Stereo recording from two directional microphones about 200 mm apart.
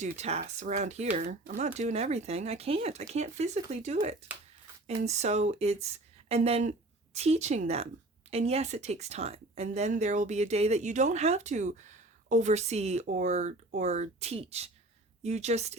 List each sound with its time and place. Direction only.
0.0 s a woman's voice: 35° right (ahead or behind)